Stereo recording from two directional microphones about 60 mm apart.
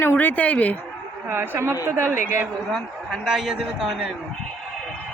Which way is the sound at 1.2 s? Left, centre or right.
Right.